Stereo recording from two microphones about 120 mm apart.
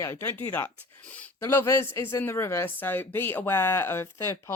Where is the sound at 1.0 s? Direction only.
10° left (ahead or behind).